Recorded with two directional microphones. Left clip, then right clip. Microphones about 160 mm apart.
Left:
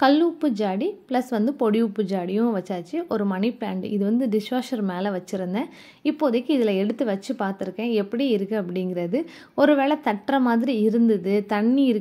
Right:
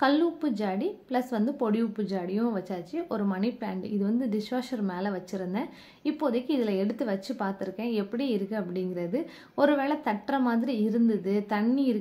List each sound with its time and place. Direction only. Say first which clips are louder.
0.0 s a woman's voice: left 6 dB; 40° left (ahead or behind)